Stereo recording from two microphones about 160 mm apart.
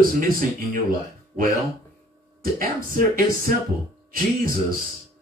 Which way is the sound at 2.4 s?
60° right (ahead or behind).